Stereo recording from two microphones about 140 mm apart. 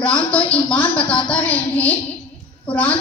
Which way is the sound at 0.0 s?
10° left (ahead or behind).